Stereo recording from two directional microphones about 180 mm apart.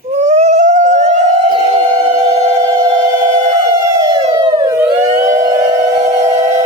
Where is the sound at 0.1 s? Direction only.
40° right (ahead or behind).